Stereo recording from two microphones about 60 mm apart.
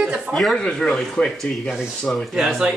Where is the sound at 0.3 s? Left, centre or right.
Centre.